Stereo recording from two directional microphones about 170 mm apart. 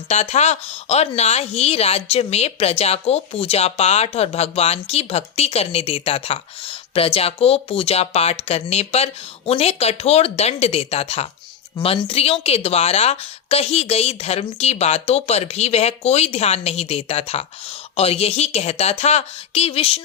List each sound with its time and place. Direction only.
0.1 s speech: 40° left (ahead or behind)